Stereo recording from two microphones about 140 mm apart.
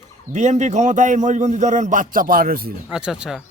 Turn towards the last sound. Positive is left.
turn(degrees=-5)  # may be behind; listen again after turning